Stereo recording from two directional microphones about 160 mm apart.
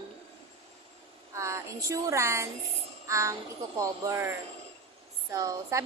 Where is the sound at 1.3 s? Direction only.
20° right (ahead or behind).